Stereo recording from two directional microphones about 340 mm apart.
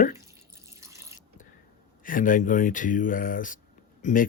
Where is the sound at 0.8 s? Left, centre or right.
Centre.